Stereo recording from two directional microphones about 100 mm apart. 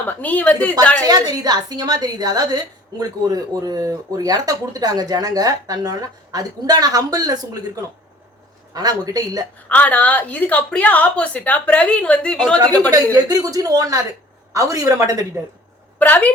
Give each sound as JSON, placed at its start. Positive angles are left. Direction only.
{"t": 0.0, "sound": "a woman's voice", "side_deg": 15}
{"t": 1.0, "sound": "speech", "side_deg": -40}
{"t": 8.7, "sound": "speech", "side_deg": -40}
{"t": 9.6, "sound": "a woman's voice", "side_deg": 15}
{"t": 12.9, "sound": "speech", "side_deg": -40}
{"t": 16.0, "sound": "a woman's voice", "side_deg": 15}